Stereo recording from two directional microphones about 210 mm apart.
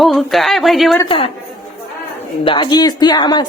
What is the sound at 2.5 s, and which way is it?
Speech, 20° left (ahead or behind).